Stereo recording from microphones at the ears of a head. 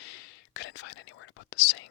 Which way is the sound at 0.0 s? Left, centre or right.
Left.